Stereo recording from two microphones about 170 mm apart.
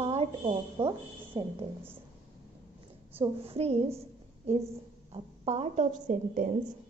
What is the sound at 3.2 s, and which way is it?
Speech, 35° right (ahead or behind).